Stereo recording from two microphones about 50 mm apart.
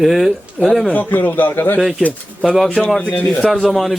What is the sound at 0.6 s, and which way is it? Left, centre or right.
Speech, centre.